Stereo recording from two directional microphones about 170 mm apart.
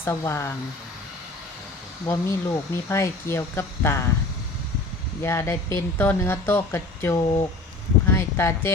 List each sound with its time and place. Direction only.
0.0 s speech: 15° left (ahead or behind)
2.0 s speech: 15° left (ahead or behind)
5.2 s speech: 15° left (ahead or behind)
8.1 s a sound: 15° left (ahead or behind)